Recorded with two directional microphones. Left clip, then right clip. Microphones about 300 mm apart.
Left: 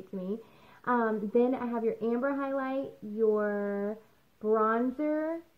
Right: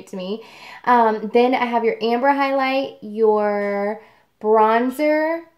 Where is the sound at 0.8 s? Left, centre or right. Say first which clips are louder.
Right 14 dB; right.